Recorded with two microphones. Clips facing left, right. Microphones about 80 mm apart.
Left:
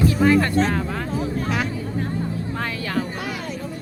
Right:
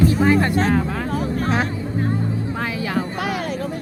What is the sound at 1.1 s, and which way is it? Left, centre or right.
Music, right.